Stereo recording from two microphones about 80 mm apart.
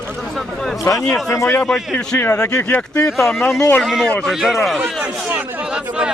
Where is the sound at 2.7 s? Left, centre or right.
Left.